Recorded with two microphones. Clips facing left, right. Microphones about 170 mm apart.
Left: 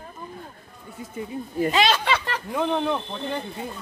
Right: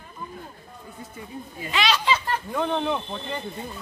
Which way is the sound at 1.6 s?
45° left (ahead or behind).